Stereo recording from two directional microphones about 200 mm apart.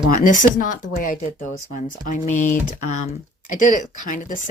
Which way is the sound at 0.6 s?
40° left (ahead or behind).